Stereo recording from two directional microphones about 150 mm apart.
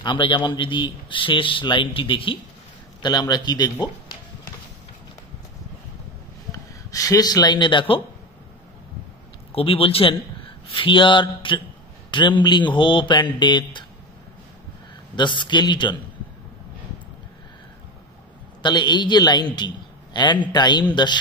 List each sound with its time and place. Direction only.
0.0 s a man's voice: 35° left (ahead or behind)
6.5 s a man's voice: 20° left (ahead or behind)
9.5 s a man's voice: 40° left (ahead or behind)
15.1 s a man's voice: 30° left (ahead or behind)
18.6 s a man's voice: 30° left (ahead or behind)